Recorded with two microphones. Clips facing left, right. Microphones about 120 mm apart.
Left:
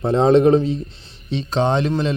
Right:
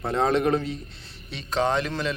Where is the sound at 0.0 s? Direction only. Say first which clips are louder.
Left 9 dB; 25° left (ahead or behind).